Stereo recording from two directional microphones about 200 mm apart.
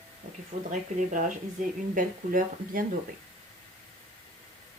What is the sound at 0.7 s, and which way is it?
Speech, 40° right (ahead or behind).